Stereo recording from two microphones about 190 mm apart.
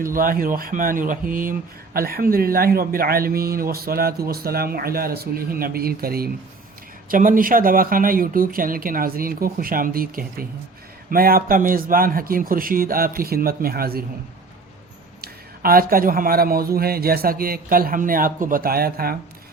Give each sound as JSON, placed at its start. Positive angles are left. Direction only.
{"t": 0.0, "sound": "speech", "side_deg": -50}
{"t": 15.2, "sound": "speech", "side_deg": -50}